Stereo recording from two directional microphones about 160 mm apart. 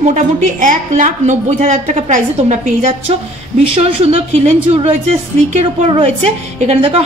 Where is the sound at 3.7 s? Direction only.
35° right (ahead or behind).